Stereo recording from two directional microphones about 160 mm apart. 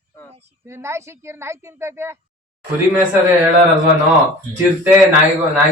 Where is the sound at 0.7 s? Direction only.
15° right (ahead or behind).